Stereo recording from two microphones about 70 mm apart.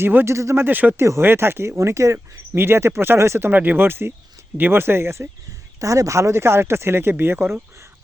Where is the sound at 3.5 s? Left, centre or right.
Right.